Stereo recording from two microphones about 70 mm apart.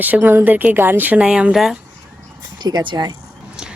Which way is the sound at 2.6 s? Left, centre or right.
Right.